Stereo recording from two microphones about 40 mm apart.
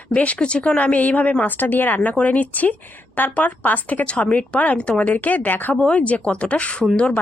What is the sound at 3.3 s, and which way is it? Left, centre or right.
Speech, left.